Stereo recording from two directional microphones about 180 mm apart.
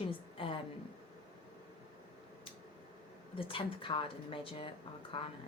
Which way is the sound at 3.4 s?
30° left (ahead or behind).